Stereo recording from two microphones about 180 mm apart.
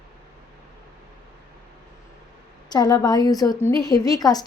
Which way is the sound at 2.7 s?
20° left (ahead or behind).